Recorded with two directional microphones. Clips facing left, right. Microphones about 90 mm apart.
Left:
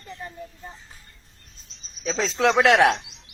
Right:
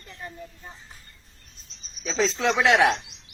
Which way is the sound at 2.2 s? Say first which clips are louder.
Left 4 dB; 65° left (ahead or behind).